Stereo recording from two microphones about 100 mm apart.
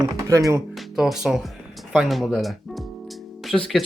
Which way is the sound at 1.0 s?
5° right (ahead or behind).